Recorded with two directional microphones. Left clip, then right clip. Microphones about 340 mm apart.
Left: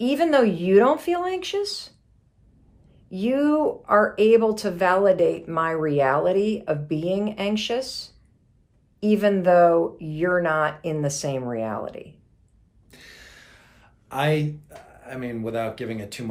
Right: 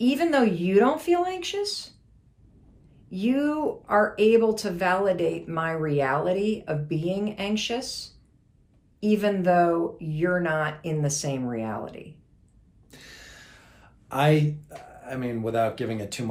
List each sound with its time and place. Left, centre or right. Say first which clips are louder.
0.0 s speech: left 3 dB; centre
3.1 s speech: left 4 dB; centre
12.9 s a sound: even; centre
14.9 s speech: right 1 dB; centre